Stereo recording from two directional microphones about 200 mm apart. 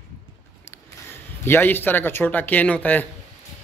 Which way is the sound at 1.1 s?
10° left (ahead or behind).